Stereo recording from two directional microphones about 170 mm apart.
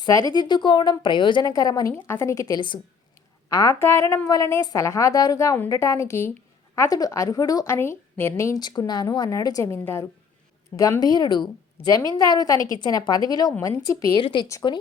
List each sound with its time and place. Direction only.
0.0 s a woman's voice: 20° left (ahead or behind)
14.2 s a woman's voice: 30° left (ahead or behind)